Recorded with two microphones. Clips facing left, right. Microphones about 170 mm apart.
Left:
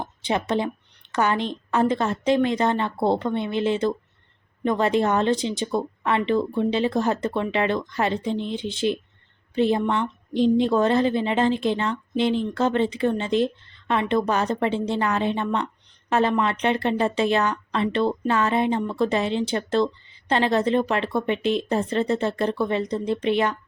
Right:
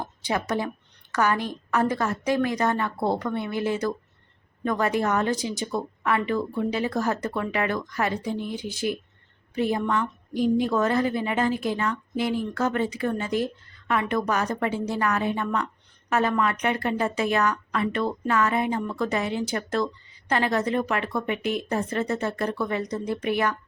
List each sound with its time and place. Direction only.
0.0 s a woman's voice: 20° left (ahead or behind)